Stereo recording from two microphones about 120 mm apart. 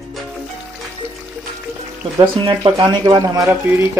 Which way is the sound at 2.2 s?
45° right (ahead or behind).